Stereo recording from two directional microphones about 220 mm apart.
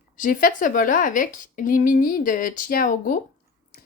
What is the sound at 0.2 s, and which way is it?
Speech, 40° left (ahead or behind).